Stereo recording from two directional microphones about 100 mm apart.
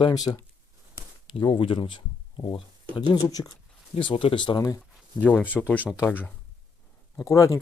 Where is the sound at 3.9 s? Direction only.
65° left (ahead or behind).